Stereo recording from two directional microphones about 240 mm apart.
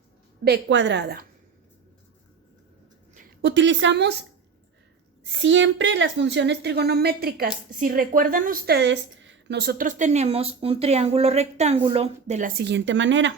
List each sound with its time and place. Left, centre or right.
0.4 s a woman's voice: right
3.4 s a woman's voice: right
5.2 s a woman's voice: right